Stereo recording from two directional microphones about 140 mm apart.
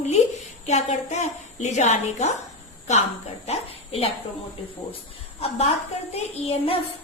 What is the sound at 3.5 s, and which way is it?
Speech, 45° left (ahead or behind).